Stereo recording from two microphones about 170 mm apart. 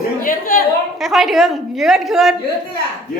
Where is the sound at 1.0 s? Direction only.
Centre (ahead or behind).